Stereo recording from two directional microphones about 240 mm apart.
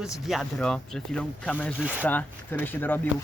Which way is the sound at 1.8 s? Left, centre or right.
Centre.